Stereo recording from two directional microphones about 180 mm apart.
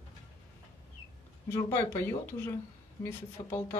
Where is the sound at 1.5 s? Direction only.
15° left (ahead or behind).